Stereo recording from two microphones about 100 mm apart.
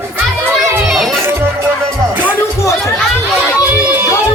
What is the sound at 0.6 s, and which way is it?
Children playing, centre (ahead or behind).